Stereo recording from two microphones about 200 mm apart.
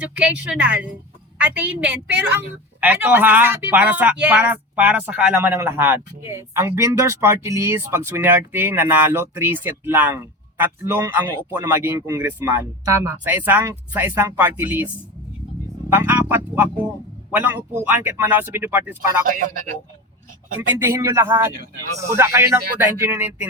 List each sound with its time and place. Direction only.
0.0 s speech: 5° right (ahead or behind)
15.9 s music: 10° right (ahead or behind)
17.3 s speech: 10° right (ahead or behind)
19.3 s a man's voice: 45° right (ahead or behind)
20.6 s speech: 15° right (ahead or behind)